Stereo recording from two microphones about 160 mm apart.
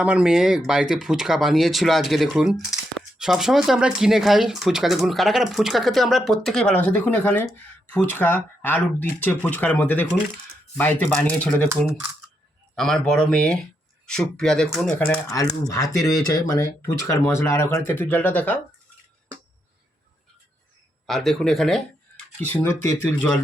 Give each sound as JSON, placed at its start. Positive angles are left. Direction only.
{"t": 0.0, "sound": "speech", "side_deg": -5}
{"t": 12.7, "sound": "speech", "side_deg": 5}
{"t": 15.7, "sound": "speech", "side_deg": 20}
{"t": 21.1, "sound": "speech", "side_deg": 0}